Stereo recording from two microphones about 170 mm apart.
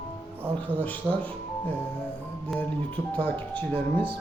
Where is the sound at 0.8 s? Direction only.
10° left (ahead or behind).